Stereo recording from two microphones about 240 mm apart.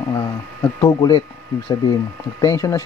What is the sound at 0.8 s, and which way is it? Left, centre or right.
Speech, centre.